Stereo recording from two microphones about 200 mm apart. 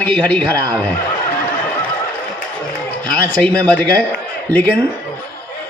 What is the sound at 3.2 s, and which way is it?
A man's voice, 5° left (ahead or behind).